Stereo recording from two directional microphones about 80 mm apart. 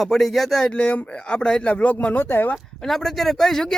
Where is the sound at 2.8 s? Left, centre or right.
Centre.